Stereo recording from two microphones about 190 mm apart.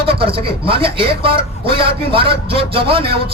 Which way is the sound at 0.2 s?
30° right (ahead or behind).